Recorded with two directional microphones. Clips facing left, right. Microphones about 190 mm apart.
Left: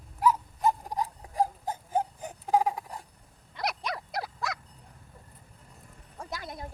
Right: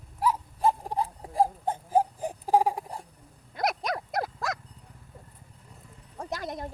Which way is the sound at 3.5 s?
45° right (ahead or behind).